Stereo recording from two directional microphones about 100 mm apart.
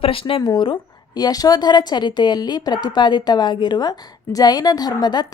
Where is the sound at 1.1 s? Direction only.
40° left (ahead or behind).